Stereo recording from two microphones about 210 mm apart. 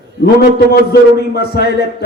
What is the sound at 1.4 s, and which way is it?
Speech, 50° left (ahead or behind).